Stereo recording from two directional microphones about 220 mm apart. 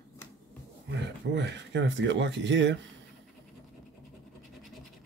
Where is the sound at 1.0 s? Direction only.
50° right (ahead or behind).